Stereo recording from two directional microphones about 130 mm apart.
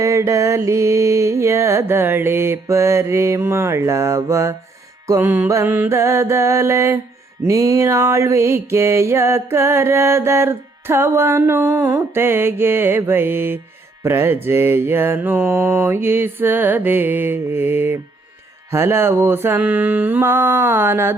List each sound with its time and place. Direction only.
0.0 s music: 25° right (ahead or behind)
14.0 s mantra: 20° right (ahead or behind)